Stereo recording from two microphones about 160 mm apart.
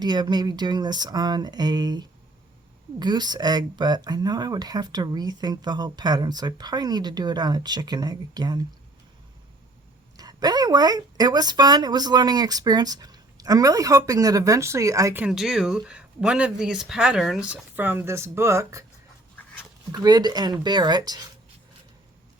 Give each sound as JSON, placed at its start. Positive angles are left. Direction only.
{"t": 0.0, "sound": "speech", "side_deg": -25}
{"t": 10.2, "sound": "speech", "side_deg": -25}
{"t": 15.2, "sound": "speech", "side_deg": -5}
{"t": 19.9, "sound": "speech", "side_deg": -25}